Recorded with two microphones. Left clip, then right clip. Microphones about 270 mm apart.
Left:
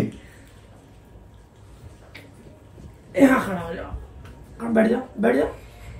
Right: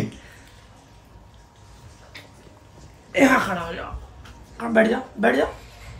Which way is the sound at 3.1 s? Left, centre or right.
Right.